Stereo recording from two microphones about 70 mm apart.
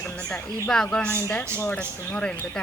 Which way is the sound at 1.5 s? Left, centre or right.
Left.